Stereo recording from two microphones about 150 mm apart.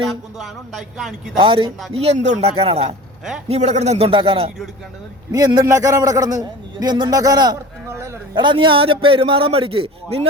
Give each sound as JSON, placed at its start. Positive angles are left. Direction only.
{"t": 0.1, "sound": "a man's voice", "side_deg": 0}
{"t": 1.4, "sound": "a man's voice", "side_deg": -35}
{"t": 5.3, "sound": "a man's voice", "side_deg": -25}
{"t": 8.4, "sound": "a man's voice", "side_deg": -35}